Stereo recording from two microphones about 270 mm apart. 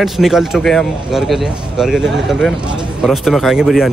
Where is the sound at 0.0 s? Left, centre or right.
Centre.